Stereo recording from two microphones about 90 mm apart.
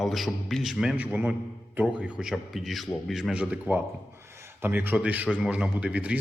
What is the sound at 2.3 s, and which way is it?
Speech, centre (ahead or behind).